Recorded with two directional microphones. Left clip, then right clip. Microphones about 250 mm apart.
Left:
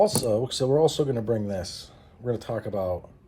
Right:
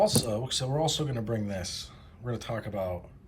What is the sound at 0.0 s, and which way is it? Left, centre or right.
Speech, left.